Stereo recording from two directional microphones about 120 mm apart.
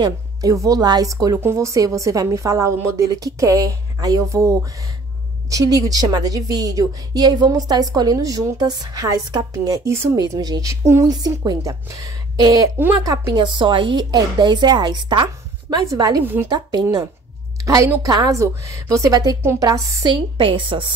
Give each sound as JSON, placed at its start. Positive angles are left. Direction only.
{"t": 0.0, "sound": "a woman's voice", "side_deg": -30}
{"t": 20.1, "sound": "a woman's voice", "side_deg": -45}